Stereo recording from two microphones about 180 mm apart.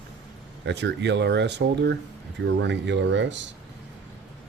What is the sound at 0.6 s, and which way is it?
Speech, 75° right (ahead or behind).